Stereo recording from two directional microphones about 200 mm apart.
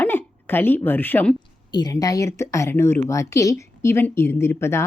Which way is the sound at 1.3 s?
20° left (ahead or behind).